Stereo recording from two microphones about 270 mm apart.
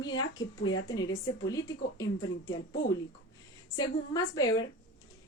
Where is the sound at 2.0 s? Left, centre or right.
Centre.